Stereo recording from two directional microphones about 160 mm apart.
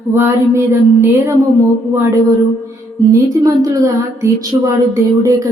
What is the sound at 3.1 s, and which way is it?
Speech, 20° right (ahead or behind).